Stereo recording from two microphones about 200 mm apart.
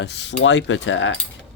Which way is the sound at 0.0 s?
60° left (ahead or behind).